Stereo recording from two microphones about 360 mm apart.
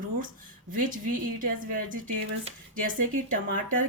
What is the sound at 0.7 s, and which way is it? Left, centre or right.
Speech, right.